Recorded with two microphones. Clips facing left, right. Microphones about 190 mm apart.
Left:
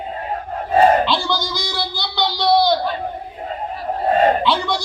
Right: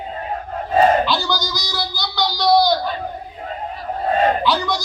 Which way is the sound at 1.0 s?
25° left (ahead or behind).